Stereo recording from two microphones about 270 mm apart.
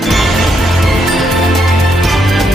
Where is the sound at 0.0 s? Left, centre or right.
Centre.